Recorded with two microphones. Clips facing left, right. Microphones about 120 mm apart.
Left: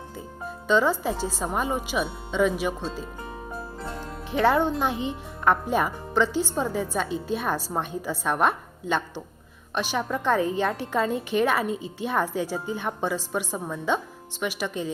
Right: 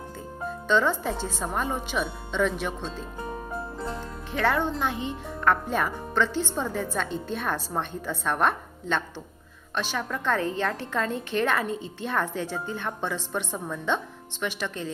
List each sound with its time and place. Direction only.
0.7 s a woman's voice: 10° left (ahead or behind)
4.3 s a woman's voice: 15° left (ahead or behind)